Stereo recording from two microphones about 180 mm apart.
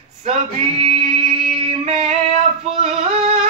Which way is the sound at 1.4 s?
40° right (ahead or behind).